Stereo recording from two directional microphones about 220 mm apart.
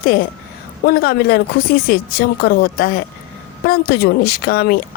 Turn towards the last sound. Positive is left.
turn(degrees=45)  # may be behind; listen again after turning